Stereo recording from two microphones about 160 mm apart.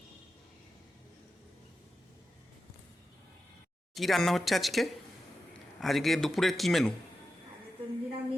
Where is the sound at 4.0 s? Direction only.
Centre (ahead or behind).